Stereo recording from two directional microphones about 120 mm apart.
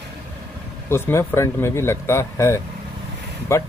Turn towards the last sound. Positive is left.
turn(degrees=25)  # may be behind; listen again after turning